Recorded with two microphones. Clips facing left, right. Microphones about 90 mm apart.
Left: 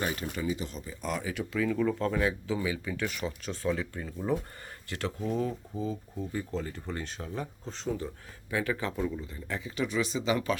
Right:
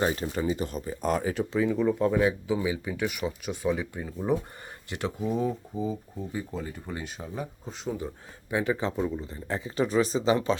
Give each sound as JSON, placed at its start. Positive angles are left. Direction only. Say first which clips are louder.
{"t": 0.0, "sound": "speech", "louder": "right 5 dB", "side_deg": -35}